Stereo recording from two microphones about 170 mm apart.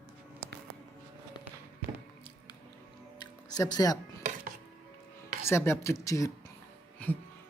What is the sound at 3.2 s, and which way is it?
Music, 25° left (ahead or behind).